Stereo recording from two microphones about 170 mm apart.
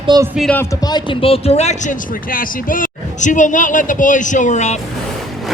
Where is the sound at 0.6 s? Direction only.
20° left (ahead or behind); by 4.8 s 45° left (ahead or behind).